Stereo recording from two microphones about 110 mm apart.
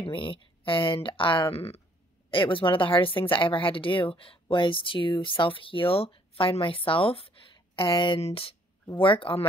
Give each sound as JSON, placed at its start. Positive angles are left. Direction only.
{"t": 0.0, "sound": "speech", "side_deg": 50}
{"t": 2.3, "sound": "speech", "side_deg": 50}
{"t": 8.9, "sound": "speech", "side_deg": 50}